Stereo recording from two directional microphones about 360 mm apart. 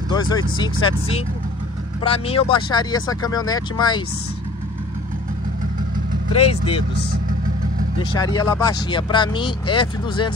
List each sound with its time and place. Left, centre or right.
0.1 s speech: centre
6.3 s speech: centre
8.1 s speech: centre